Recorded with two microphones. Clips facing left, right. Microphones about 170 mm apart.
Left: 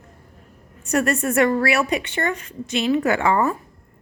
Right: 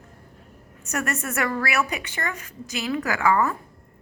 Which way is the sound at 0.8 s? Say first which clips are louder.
Left 8 dB; 30° left (ahead or behind).